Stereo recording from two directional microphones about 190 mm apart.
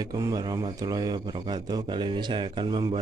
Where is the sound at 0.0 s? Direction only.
20° right (ahead or behind).